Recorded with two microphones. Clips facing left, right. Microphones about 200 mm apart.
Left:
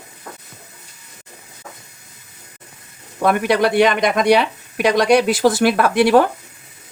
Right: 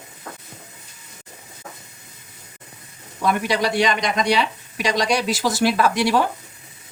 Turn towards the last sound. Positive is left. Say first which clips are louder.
# left 5 dB
turn(degrees=55)  # may be behind; listen again after turning